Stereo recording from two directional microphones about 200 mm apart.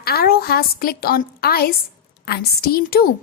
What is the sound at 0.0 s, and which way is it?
Speech, 50° left (ahead or behind).